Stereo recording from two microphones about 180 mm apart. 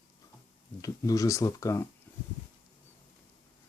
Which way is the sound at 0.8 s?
20° left (ahead or behind).